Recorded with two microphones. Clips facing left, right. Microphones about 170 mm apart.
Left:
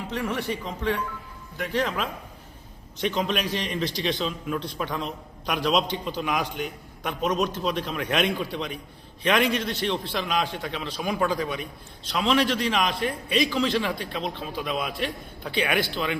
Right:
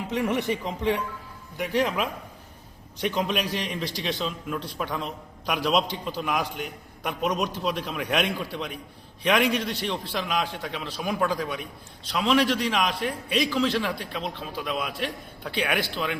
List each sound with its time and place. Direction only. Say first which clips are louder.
0.1 s a man's voice: right 3 dB; 15° right (ahead or behind)